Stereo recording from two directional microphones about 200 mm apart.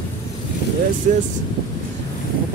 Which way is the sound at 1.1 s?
40° right (ahead or behind).